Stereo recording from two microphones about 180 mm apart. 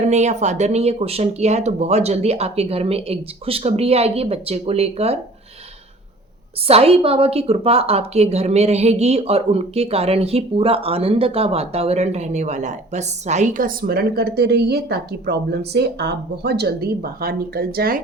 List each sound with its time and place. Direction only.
0.1 s a woman's voice: 40° right (ahead or behind)
6.7 s a woman's voice: 35° right (ahead or behind); by 18.0 s 55° right (ahead or behind)